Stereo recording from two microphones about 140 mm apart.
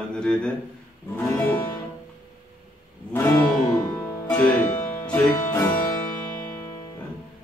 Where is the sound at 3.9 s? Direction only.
15° left (ahead or behind).